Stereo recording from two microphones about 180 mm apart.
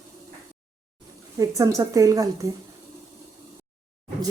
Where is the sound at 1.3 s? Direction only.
15° right (ahead or behind).